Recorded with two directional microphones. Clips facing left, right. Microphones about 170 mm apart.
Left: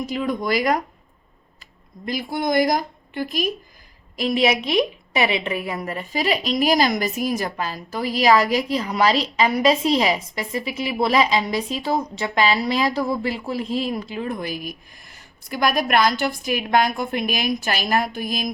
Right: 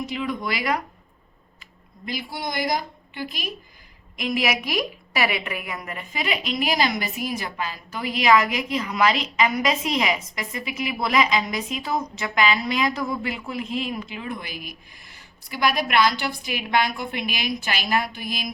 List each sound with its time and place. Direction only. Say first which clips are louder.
0.0 s a woman's voice: left 4 dB; 40° left (ahead or behind)
2.0 s a woman's voice: left 7 dB; 45° left (ahead or behind)
4.2 s a woman's voice: left 5 dB; 30° left (ahead or behind)